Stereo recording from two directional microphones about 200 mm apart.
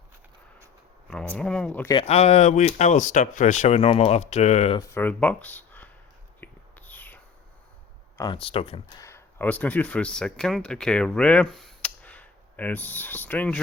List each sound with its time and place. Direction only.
1.1 s speech: 5° left (ahead or behind)
1.9 s speech: 30° left (ahead or behind)
4.8 s speech: 10° left (ahead or behind)
6.4 s whispering: 10° left (ahead or behind)
8.2 s speech: 25° left (ahead or behind)
9.0 s speech: 15° left (ahead or behind)